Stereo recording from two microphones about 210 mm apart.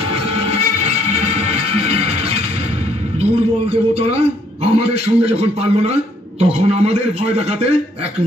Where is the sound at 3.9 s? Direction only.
30° right (ahead or behind).